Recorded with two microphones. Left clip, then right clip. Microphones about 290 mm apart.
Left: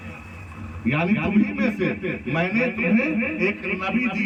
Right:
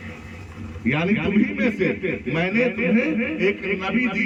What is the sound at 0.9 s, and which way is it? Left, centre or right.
Speech, centre.